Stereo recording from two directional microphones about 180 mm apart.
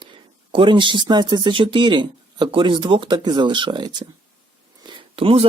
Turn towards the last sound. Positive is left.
turn(degrees=-30)  # may be behind; listen again after turning